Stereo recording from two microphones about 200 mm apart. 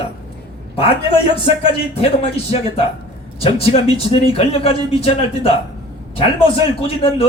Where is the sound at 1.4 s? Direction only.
30° left (ahead or behind).